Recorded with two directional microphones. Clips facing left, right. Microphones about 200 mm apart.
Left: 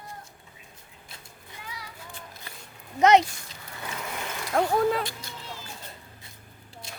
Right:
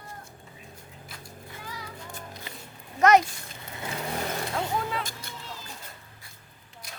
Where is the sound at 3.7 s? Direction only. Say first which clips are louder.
Right 3 dB; 25° right (ahead or behind).